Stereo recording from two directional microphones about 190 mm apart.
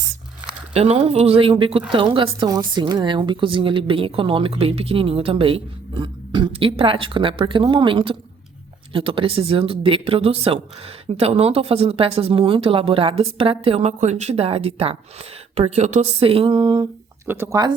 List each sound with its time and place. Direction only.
0.7 s a woman's voice: 30° right (ahead or behind)
17.2 s speech: 10° right (ahead or behind)